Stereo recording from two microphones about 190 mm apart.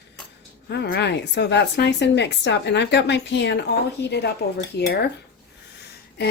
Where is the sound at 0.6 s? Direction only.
60° left (ahead or behind).